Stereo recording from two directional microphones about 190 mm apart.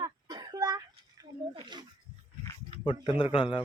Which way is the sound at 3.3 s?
25° left (ahead or behind).